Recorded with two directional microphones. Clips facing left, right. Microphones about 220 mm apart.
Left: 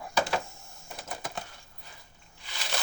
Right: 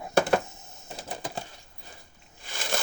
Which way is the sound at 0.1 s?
55° right (ahead or behind).